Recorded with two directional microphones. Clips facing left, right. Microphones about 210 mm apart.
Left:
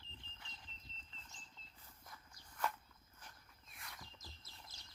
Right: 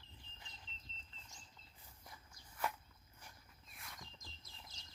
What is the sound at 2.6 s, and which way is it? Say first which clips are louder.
Walk: even; 10° right (ahead or behind).